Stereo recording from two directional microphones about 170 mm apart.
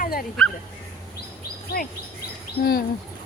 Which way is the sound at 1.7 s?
60° left (ahead or behind).